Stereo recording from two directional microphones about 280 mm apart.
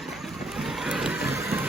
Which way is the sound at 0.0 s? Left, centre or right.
Centre.